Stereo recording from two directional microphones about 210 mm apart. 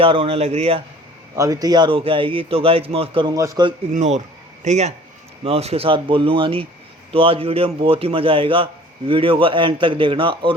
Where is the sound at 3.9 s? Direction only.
35° right (ahead or behind).